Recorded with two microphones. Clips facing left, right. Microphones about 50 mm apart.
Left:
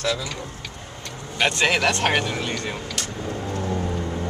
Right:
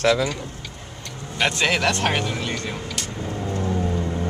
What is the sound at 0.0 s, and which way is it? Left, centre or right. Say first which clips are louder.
Speech: right 7 dB; right.